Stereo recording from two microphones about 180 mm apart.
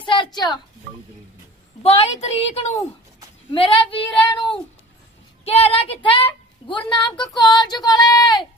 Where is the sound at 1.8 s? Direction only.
35° left (ahead or behind).